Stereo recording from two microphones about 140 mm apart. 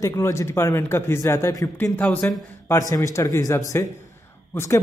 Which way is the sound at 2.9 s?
25° left (ahead or behind).